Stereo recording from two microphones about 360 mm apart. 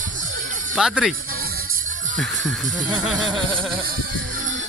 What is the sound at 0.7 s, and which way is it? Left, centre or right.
Speech, centre.